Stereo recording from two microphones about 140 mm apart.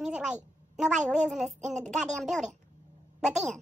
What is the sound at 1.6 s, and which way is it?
Speech, 55° right (ahead or behind).